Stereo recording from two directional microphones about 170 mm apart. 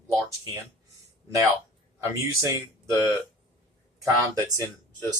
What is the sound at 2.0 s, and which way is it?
Speech, 20° right (ahead or behind).